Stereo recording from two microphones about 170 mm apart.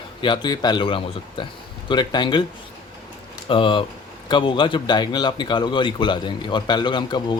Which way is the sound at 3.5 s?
30° left (ahead or behind).